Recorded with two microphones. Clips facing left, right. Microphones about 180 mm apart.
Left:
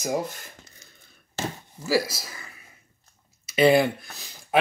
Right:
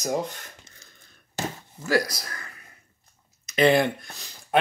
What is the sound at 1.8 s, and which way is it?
Speech, 5° left (ahead or behind).